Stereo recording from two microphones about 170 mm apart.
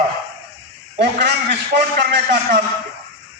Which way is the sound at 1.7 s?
75° right (ahead or behind).